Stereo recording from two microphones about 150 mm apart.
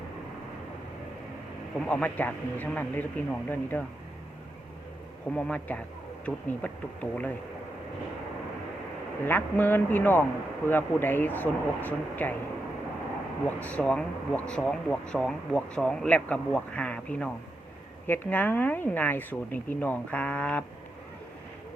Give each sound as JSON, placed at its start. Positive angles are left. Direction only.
{"t": 1.8, "sound": "speech", "side_deg": 10}
{"t": 5.3, "sound": "speech", "side_deg": 10}
{"t": 9.2, "sound": "speech", "side_deg": 15}
{"t": 13.6, "sound": "speech", "side_deg": 10}